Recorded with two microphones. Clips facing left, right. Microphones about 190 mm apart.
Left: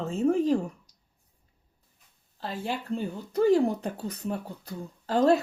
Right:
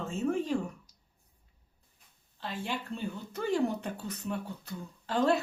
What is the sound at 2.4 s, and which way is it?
Speech, 40° left (ahead or behind).